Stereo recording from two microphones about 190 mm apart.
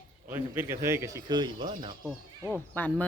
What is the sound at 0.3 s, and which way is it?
A man's voice, 10° right (ahead or behind).